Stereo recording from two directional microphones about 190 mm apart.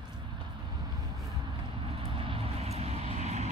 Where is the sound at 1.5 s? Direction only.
30° right (ahead or behind).